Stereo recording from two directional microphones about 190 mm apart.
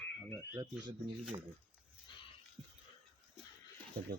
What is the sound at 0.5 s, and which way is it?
Speech, 20° right (ahead or behind).